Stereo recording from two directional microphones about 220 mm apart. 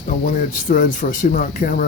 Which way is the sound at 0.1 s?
40° left (ahead or behind).